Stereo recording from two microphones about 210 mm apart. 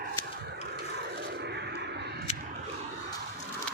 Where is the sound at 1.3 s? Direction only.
55° right (ahead or behind).